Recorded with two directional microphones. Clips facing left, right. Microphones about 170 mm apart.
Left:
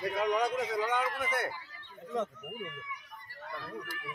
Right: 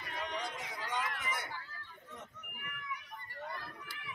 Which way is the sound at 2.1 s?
90° left.